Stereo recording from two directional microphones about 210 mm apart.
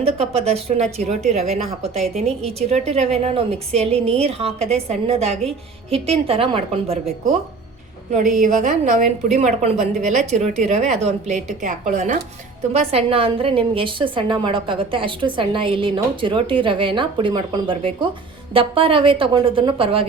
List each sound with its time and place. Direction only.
0.0 s a woman's voice: 30° right (ahead or behind)
8.4 s a woman's voice: 35° right (ahead or behind)